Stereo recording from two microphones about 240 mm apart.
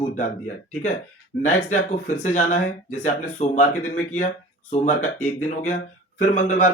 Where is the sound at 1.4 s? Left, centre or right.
Left.